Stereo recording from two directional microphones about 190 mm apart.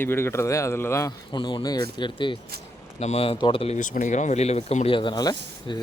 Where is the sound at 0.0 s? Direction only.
10° left (ahead or behind).